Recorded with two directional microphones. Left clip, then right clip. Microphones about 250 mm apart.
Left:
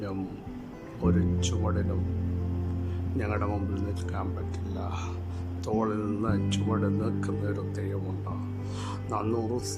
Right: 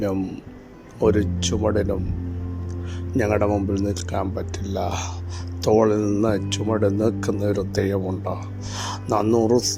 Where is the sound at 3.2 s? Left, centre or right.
Centre.